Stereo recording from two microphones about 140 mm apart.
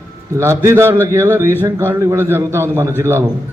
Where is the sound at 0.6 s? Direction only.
20° right (ahead or behind).